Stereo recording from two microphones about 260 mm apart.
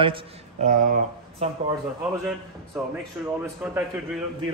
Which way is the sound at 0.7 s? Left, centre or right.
Right.